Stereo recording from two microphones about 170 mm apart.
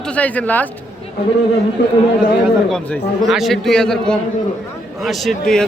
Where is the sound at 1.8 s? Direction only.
90° left.